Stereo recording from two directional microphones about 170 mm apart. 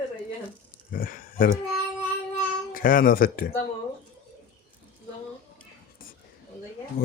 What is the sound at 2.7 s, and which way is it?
Speech, 55° left (ahead or behind).